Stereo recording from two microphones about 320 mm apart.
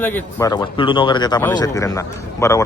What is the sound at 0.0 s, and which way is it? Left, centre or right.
A man's voice, centre.